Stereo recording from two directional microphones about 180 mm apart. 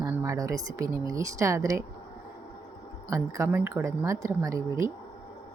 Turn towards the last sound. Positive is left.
turn(degrees=-15)  # may be behind; listen again after turning